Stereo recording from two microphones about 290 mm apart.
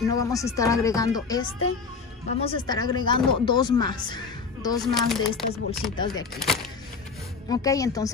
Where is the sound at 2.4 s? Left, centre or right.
Centre.